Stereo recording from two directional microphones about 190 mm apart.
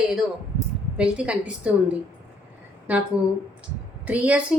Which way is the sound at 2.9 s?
10° right (ahead or behind).